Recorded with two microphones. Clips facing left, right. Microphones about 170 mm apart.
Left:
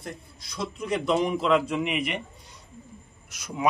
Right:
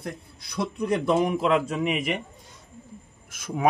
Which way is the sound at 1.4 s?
45° right (ahead or behind).